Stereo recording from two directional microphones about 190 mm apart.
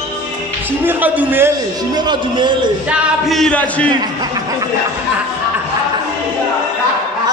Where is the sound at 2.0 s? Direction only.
25° right (ahead or behind).